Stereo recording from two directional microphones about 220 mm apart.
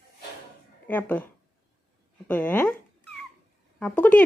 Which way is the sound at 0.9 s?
5° left (ahead or behind).